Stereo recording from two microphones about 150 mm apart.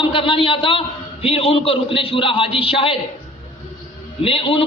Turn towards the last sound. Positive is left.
turn(degrees=35)  # may be behind; listen again after turning